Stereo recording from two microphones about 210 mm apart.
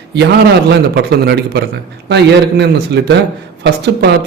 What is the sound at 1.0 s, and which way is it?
A man's voice, 50° right (ahead or behind).